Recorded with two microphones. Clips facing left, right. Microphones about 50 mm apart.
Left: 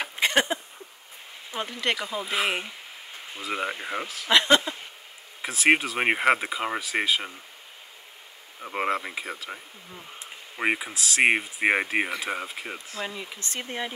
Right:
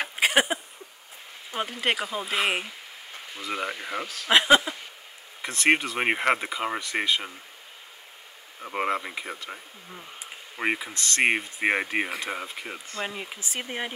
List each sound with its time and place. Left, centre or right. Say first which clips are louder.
0.1 s a sound: right 1 dB; centre
1.9 s speech: even; centre
3.3 s speech: left 1 dB; centre
4.3 s speech: right 1 dB; centre
5.4 s speech: left 1 dB; centre
8.5 s speech: even; centre
13.0 s speech: right 2 dB; right
13.5 s speech: even; centre